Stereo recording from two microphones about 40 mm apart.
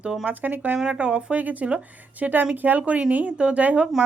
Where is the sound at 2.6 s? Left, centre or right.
Right.